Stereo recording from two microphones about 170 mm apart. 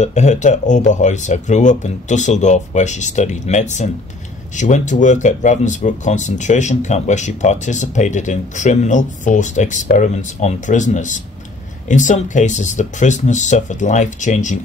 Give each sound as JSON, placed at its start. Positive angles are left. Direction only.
{"t": 0.0, "sound": "speech", "side_deg": 40}